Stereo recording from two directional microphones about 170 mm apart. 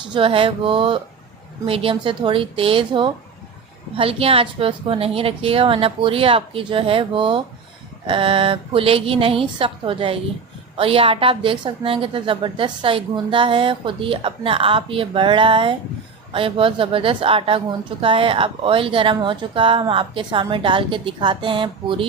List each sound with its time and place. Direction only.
0.1 s a woman's voice: 30° right (ahead or behind)